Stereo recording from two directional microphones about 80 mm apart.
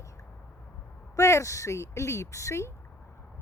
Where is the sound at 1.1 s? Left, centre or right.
Left.